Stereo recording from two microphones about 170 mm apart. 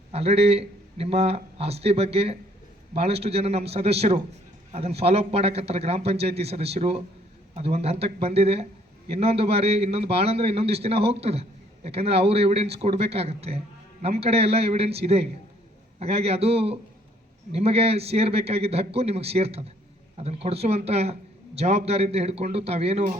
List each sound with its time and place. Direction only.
0.1 s a man's voice: 35° right (ahead or behind)